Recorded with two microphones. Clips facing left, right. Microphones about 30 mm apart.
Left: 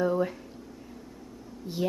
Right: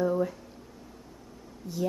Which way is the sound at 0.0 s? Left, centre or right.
Left.